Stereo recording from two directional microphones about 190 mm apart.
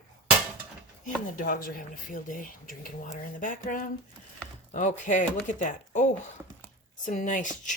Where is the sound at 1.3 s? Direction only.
45° left (ahead or behind).